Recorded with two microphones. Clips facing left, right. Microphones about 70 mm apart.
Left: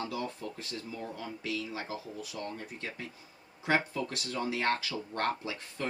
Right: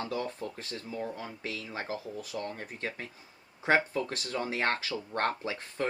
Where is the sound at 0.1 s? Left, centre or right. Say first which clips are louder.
Right 2 dB; right.